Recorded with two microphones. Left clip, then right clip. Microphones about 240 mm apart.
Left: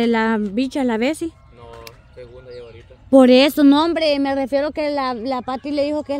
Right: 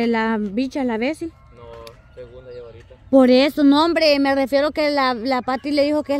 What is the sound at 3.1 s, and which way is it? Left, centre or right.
Speech, centre.